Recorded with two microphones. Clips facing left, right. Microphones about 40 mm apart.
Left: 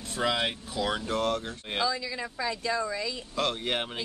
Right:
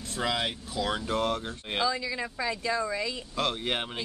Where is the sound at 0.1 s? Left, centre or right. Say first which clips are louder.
Left 2 dB; centre.